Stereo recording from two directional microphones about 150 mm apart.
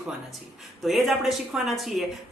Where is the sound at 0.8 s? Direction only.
Centre (ahead or behind).